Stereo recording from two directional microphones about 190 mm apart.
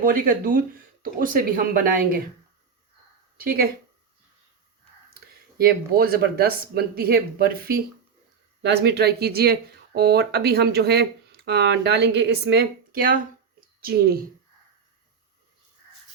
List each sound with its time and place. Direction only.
0.0 s speech: 45° right (ahead or behind)
5.5 s speech: 55° right (ahead or behind)